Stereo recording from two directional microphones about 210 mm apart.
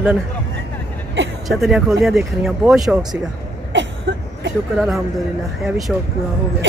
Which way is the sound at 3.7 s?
55° right (ahead or behind).